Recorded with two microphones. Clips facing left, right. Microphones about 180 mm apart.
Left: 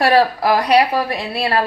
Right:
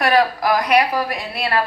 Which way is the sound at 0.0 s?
30° left (ahead or behind).